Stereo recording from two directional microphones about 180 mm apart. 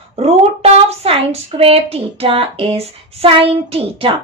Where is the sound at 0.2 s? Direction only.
35° right (ahead or behind).